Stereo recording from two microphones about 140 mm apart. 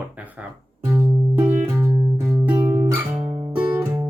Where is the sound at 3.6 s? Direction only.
15° right (ahead or behind).